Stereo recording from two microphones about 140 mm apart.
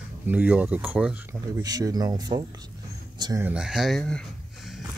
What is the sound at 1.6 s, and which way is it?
Speech, 30° right (ahead or behind).